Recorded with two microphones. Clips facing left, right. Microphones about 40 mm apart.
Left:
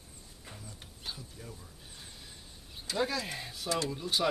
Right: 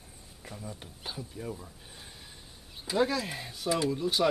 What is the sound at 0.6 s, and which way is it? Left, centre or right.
Speech, centre.